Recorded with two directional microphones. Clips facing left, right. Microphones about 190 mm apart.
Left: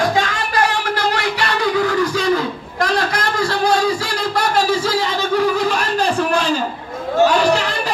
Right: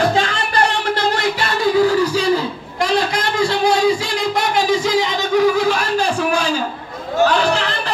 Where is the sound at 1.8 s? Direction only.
35° right (ahead or behind); by 6.6 s 5° right (ahead or behind).